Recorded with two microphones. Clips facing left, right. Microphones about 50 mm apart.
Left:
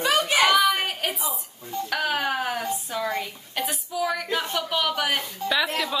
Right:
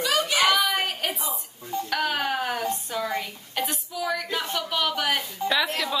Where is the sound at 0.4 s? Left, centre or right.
Centre.